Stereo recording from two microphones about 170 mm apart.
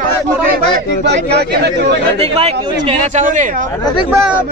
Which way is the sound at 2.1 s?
35° right (ahead or behind).